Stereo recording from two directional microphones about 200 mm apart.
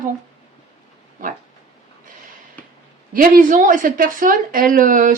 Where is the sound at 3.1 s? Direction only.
45° right (ahead or behind).